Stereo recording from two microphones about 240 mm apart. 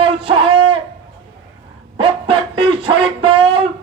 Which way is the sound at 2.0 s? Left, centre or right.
Right.